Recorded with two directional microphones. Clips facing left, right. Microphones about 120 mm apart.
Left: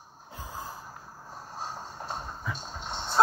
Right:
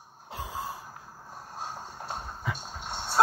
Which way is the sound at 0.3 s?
90° right.